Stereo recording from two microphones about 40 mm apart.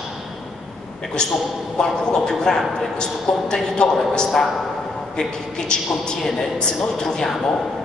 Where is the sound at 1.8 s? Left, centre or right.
Centre.